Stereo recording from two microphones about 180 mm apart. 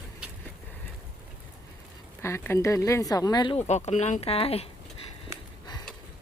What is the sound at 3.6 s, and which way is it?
Speech, 40° left (ahead or behind).